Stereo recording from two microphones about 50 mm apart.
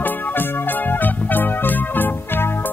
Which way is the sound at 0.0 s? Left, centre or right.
Left.